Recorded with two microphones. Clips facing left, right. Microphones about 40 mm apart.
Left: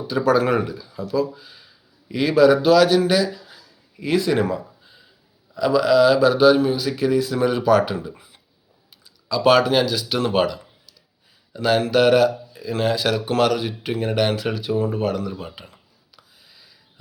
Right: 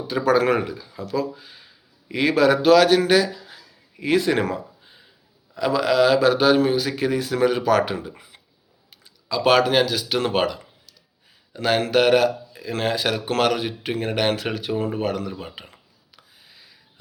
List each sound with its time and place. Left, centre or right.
0.1 s speech: right
4.0 s speech: right
5.5 s a man's voice: right
11.5 s speech: right
15.5 s a sound: right